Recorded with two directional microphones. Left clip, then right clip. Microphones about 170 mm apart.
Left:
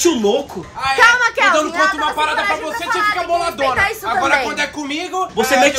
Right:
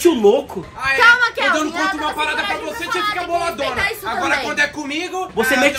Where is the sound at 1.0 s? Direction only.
50° left (ahead or behind).